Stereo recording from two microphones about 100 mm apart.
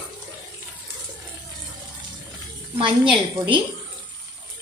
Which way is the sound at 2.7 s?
55° right (ahead or behind).